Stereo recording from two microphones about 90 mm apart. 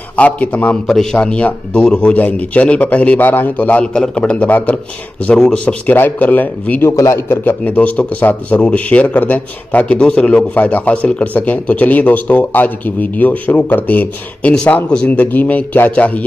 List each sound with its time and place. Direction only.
0.1 s a man's voice: 15° left (ahead or behind)
6.9 s a man's voice: 30° left (ahead or behind); by 16.3 s 15° left (ahead or behind)